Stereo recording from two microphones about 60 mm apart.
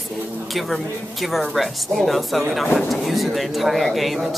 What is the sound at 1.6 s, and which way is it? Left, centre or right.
Speech, centre.